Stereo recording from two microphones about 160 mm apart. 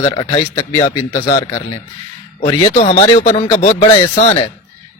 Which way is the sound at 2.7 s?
45° left (ahead or behind).